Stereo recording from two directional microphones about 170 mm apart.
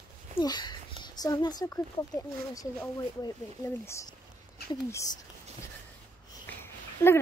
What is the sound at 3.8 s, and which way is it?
Speech, 15° left (ahead or behind).